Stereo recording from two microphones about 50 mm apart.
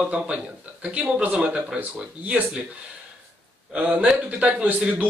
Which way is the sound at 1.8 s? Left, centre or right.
Right.